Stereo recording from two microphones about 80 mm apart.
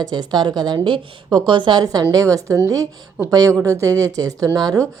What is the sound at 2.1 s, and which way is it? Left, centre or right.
A woman's voice, right.